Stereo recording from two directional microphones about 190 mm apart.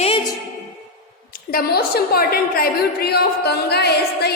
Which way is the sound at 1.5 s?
50° left (ahead or behind).